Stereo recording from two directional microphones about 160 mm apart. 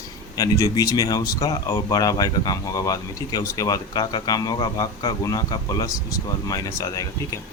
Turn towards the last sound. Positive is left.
turn(degrees=20)  # may be behind; listen again after turning